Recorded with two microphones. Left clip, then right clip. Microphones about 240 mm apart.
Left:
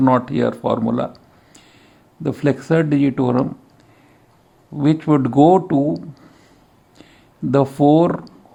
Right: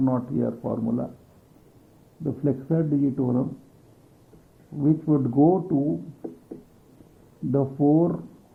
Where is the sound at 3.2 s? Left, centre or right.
Left.